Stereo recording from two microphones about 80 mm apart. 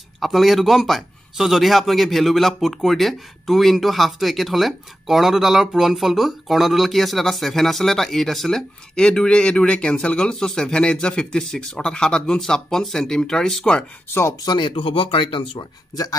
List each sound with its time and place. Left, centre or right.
0.2 s a man's voice: centre
14.4 s speech: left